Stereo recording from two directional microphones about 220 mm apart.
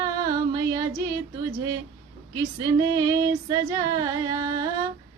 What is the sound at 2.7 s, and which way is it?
Female singing, 15° right (ahead or behind).